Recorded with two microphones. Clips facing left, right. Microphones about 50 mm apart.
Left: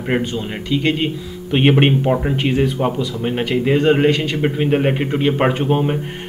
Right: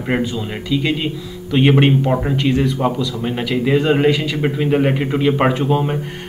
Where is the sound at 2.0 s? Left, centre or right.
Centre.